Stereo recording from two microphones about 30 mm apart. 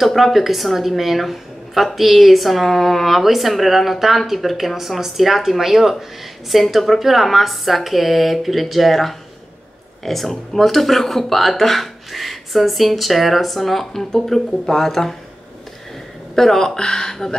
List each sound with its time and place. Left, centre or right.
0.1 s speech: centre
16.3 s speech: centre